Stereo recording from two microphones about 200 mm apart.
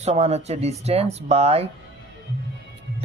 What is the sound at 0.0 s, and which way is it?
Speech, 35° right (ahead or behind).